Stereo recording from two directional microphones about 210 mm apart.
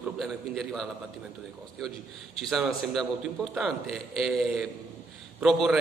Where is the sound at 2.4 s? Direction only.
Centre (ahead or behind).